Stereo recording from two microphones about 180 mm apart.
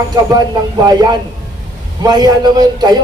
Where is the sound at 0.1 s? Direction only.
20° right (ahead or behind).